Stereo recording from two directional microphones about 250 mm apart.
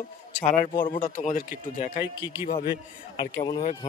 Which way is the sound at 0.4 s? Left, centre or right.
Left.